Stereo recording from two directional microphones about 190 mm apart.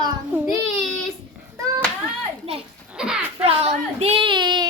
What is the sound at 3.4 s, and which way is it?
Speech, 30° right (ahead or behind).